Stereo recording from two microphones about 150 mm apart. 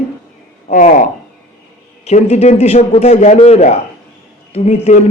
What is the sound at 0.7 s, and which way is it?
Speech, 60° left (ahead or behind).